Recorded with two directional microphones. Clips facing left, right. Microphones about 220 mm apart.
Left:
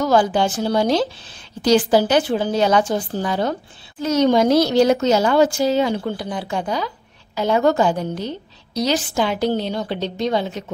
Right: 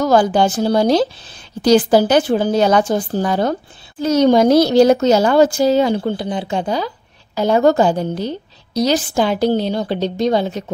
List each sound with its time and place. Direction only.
0.0 s a woman's voice: 45° right (ahead or behind)